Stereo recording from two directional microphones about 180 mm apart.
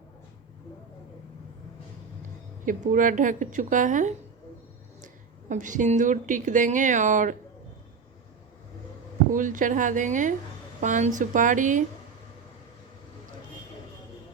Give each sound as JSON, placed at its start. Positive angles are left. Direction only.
{"t": 2.6, "sound": "speech", "side_deg": -45}
{"t": 5.5, "sound": "speech", "side_deg": -45}
{"t": 9.3, "sound": "speech", "side_deg": -45}